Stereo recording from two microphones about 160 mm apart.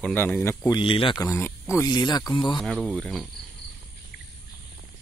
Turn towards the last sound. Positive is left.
turn(degrees=0)  # may be behind; listen again after turning